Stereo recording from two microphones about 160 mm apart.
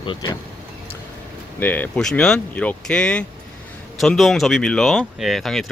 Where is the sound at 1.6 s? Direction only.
10° left (ahead or behind).